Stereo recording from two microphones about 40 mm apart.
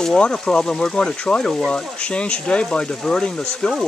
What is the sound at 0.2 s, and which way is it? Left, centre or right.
Speech, left.